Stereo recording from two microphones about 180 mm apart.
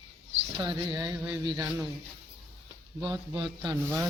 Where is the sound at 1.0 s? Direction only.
20° right (ahead or behind).